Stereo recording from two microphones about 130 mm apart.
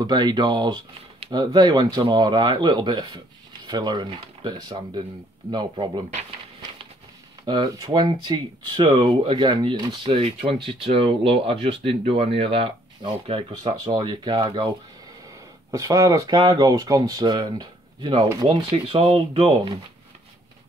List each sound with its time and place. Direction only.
0.0 s speech: 30° right (ahead or behind)
7.4 s speech: 35° right (ahead or behind)
15.7 s speech: 25° right (ahead or behind)
18.7 s speech: 45° right (ahead or behind)